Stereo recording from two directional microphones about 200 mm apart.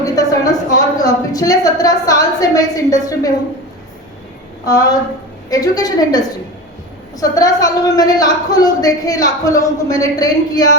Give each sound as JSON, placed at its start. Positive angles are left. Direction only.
{"t": 0.0, "sound": "a sound", "side_deg": 15}
{"t": 0.9, "sound": "a woman's voice", "side_deg": 20}
{"t": 4.6, "sound": "a woman's voice", "side_deg": 20}